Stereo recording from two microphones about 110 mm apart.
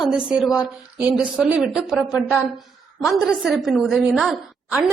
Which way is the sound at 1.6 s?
Centre (ahead or behind).